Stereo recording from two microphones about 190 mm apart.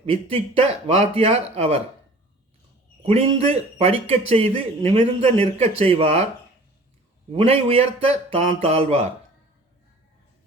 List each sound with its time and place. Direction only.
0.0 s speech: 30° right (ahead or behind)
3.0 s speech: 30° right (ahead or behind)
7.3 s speech: 30° right (ahead or behind)
8.0 s a sound: 30° right (ahead or behind)
8.6 s speech: 30° right (ahead or behind)